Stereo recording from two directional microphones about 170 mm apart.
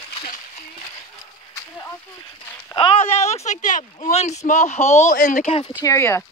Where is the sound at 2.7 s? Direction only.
35° left (ahead or behind).